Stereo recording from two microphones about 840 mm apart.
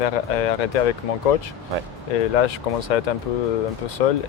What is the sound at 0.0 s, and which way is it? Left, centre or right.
Speech, left.